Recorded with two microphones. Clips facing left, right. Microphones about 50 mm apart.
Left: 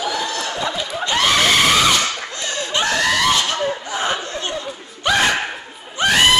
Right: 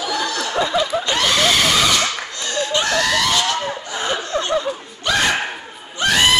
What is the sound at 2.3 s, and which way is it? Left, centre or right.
Laughter, left.